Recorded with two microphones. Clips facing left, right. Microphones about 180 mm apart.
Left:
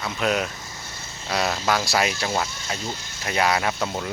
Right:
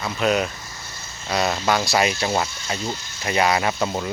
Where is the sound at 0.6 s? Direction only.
25° left (ahead or behind).